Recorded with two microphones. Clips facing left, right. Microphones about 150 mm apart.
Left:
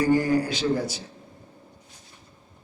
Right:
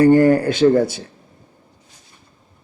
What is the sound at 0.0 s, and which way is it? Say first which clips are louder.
A man's voice: right 9 dB; 60° right (ahead or behind).